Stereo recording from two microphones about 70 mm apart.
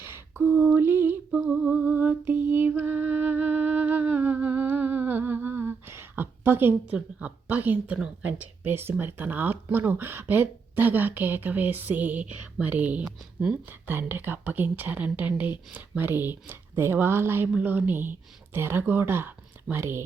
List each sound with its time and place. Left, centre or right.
0.0 s a sound: right
1.5 s music: centre
6.9 s a woman's voice: right
7.9 s a woman's voice: centre
8.2 s a woman's voice: right
13.8 s a woman's voice: right